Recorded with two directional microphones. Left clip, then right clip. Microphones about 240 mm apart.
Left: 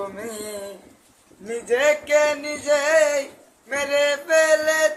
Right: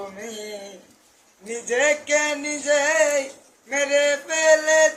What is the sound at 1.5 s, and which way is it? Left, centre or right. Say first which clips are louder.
Male singing: left 1 dB; centre.